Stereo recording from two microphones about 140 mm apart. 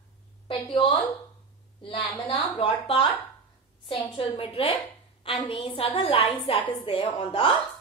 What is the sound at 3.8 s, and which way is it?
A woman's voice, 40° left (ahead or behind).